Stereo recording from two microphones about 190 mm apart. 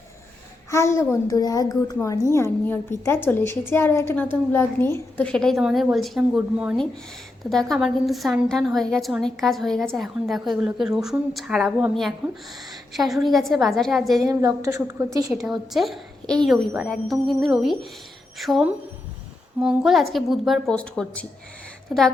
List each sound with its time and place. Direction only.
0.7 s a woman's voice: 15° left (ahead or behind)
14.3 s a woman's voice: 15° right (ahead or behind)
15.3 s a woman's voice: centre (ahead or behind)